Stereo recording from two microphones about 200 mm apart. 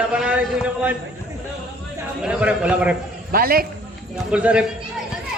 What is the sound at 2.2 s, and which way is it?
Speech, 5° right (ahead or behind).